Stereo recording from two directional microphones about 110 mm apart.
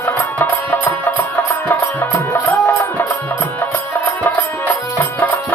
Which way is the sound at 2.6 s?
15° left (ahead or behind).